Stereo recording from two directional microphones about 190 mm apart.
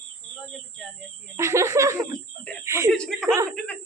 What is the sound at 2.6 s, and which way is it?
Chuckle, 15° right (ahead or behind).